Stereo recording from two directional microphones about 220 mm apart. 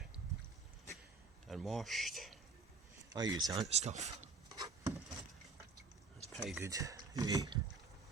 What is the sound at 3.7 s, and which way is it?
Speech, 30° right (ahead or behind).